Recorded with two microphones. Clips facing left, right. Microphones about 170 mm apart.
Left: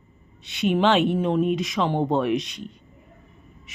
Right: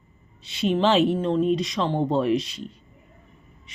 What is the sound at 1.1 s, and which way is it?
Speech, 10° left (ahead or behind).